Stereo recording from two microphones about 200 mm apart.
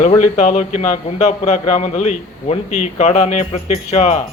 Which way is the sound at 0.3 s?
35° left (ahead or behind).